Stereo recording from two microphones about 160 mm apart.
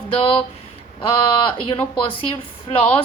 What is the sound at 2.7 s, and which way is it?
Speech, 35° left (ahead or behind).